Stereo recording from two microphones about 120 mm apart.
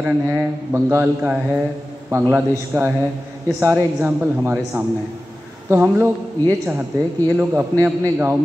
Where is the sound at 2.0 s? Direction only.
20° right (ahead or behind).